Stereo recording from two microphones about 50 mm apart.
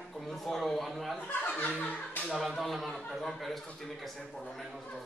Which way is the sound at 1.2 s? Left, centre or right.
Left.